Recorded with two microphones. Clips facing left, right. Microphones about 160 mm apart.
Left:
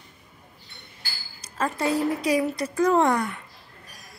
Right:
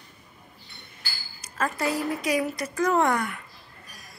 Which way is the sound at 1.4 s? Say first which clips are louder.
Left 1 dB; 25° left (ahead or behind).